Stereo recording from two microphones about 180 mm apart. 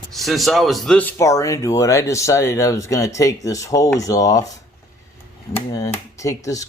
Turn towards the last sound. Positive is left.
turn(degrees=20)  # may be behind; listen again after turning